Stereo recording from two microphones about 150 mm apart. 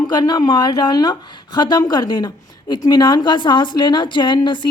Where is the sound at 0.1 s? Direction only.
30° left (ahead or behind).